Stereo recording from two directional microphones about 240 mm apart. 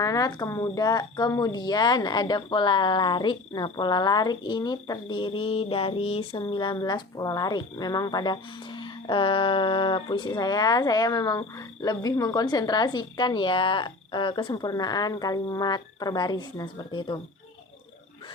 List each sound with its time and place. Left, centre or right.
0.0 s speech: centre